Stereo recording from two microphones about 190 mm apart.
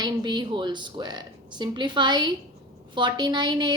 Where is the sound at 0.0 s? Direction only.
20° right (ahead or behind).